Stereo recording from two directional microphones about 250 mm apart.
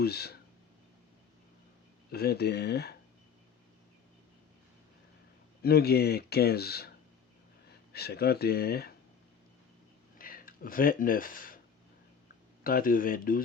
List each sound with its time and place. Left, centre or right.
0.0 s speech: left
2.0 s speech: left
5.6 s speech: left
7.9 s speech: left
10.2 s speech: left
12.6 s speech: left